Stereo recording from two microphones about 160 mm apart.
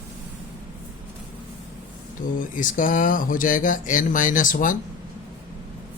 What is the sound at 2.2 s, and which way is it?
Speech, 60° left (ahead or behind).